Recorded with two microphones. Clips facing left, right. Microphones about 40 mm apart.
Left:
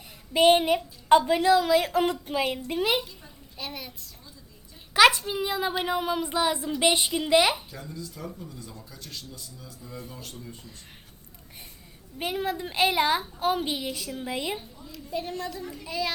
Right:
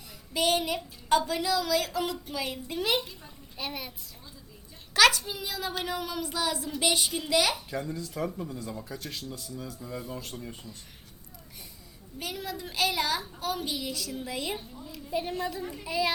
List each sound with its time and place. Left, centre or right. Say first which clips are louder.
0.3 s a child's voice: left 8 dB; left
2.6 s speech: right 1 dB; centre
3.6 s a woman's voice: right 1 dB; centre
4.9 s a child's voice: left 3 dB; left
8.2 s speech: right 6 dB; right
8.8 s speech: right 4 dB; right
12.2 s a child's voice: left 7 dB; left
14.8 s a child's voice: right 1 dB; centre